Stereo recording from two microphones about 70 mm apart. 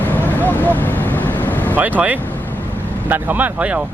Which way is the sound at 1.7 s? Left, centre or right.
Right.